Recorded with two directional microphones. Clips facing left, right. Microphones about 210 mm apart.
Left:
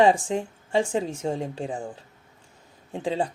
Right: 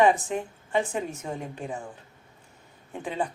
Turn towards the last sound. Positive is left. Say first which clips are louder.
# left 4 dB
turn(degrees=30)  # may be behind; listen again after turning